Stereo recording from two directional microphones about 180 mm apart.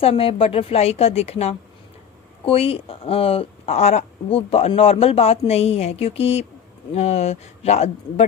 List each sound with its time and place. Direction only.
0.0 s speech: 30° left (ahead or behind)